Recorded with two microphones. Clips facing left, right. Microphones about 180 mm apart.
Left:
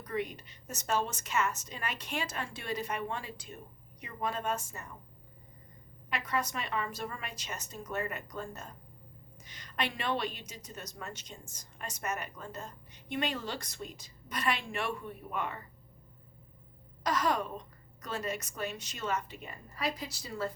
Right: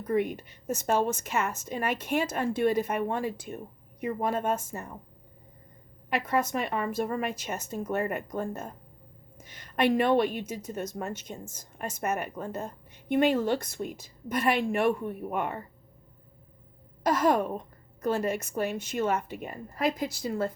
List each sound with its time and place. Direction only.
0.0 s a woman's voice: 55° right (ahead or behind)
6.1 s a woman's voice: 55° right (ahead or behind)
17.0 s a woman's voice: 50° right (ahead or behind)